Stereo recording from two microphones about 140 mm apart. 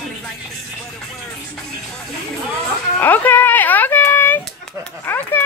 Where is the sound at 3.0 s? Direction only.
15° left (ahead or behind).